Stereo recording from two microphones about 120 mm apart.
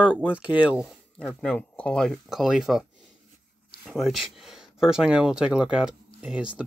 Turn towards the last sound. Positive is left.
turn(degrees=-10)  # may be behind; listen again after turning